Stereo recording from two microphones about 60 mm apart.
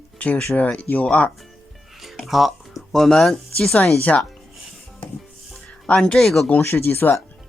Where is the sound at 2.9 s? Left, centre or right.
Centre.